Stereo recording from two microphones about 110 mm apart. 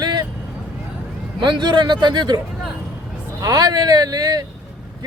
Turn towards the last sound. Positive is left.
turn(degrees=-35)  # may be behind; listen again after turning